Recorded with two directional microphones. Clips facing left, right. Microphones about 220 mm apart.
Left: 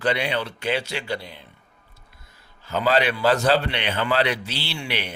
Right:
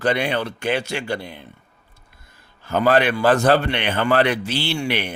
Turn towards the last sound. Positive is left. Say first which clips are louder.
# right 7 dB
turn(degrees=-50)  # may be behind; listen again after turning